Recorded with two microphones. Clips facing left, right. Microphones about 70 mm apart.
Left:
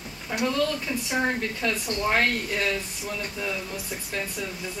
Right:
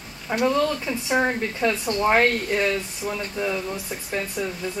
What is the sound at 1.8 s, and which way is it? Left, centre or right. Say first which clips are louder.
Speech: right 5 dB; right.